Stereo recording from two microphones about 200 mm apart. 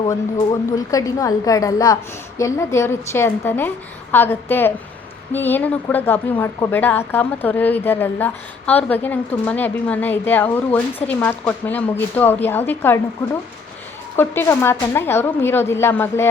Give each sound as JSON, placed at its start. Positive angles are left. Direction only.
{"t": 0.9, "sound": "speech", "side_deg": 15}
{"t": 14.2, "sound": "speech", "side_deg": 10}